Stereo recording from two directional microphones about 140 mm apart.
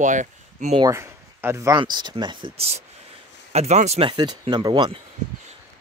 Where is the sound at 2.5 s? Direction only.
45° right (ahead or behind).